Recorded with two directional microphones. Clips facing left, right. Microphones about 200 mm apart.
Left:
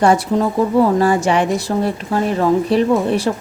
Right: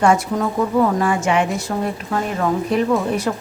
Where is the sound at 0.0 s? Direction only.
35° left (ahead or behind).